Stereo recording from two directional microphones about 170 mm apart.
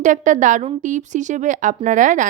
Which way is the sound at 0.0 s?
50° right (ahead or behind).